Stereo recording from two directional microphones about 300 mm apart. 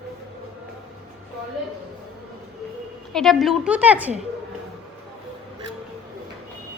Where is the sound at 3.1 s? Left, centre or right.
Centre.